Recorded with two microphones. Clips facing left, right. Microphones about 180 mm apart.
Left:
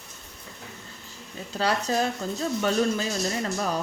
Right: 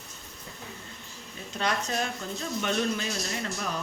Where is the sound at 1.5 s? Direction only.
35° left (ahead or behind).